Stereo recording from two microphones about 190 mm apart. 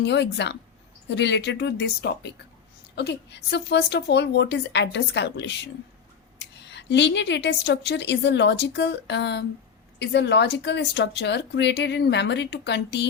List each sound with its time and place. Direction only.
0.0 s a woman's voice: 65° left (ahead or behind)